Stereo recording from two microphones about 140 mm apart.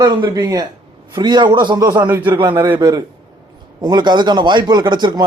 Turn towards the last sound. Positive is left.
turn(degrees=-30)  # may be behind; listen again after turning